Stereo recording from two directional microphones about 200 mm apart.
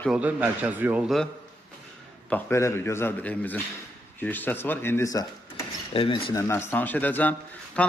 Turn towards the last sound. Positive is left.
turn(degrees=5)  # may be behind; listen again after turning